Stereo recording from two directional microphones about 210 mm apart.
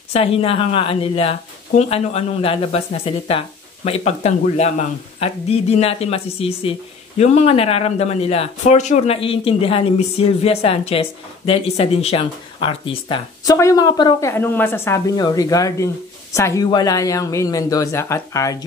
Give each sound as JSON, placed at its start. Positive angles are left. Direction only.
{"t": 0.1, "sound": "speech", "side_deg": 25}